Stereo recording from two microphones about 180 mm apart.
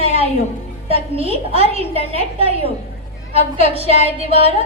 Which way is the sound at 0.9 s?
35° right (ahead or behind).